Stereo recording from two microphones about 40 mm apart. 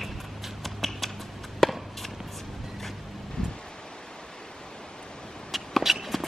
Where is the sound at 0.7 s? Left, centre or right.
Centre.